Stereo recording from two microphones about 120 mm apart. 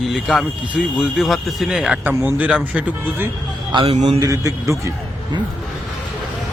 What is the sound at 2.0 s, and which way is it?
Speech, 15° right (ahead or behind).